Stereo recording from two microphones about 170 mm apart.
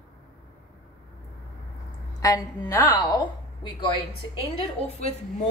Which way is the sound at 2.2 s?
20° left (ahead or behind).